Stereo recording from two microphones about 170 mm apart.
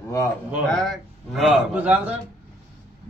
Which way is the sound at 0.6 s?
5° left (ahead or behind).